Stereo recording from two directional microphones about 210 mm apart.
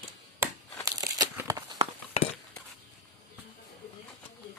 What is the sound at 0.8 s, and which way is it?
Crumpling, 15° right (ahead or behind).